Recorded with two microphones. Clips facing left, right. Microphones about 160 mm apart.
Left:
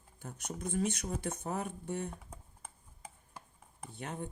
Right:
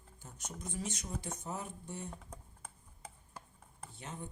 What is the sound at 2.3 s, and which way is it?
Tick-tock, 10° left (ahead or behind).